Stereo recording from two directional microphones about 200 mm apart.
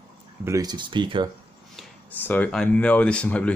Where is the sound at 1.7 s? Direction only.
10° left (ahead or behind).